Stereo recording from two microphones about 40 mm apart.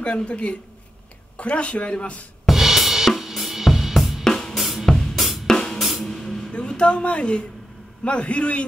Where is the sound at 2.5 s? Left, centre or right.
Centre.